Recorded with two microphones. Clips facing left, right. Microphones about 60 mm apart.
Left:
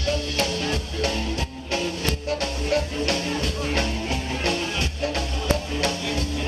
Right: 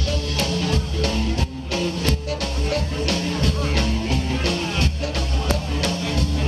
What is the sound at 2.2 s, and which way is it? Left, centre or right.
Music, left.